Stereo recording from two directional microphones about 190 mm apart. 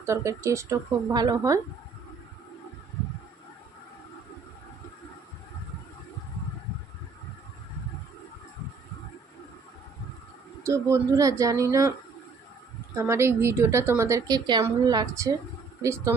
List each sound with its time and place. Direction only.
0.0 s a woman's voice: 15° right (ahead or behind)
10.6 s a woman's voice: 15° right (ahead or behind)
12.9 s a woman's voice: 15° right (ahead or behind)